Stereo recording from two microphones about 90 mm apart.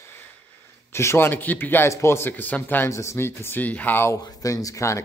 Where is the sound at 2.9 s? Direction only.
30° left (ahead or behind).